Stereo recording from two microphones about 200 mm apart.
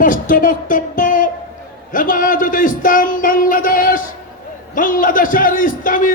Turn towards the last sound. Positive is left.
turn(degrees=40)  # may be behind; listen again after turning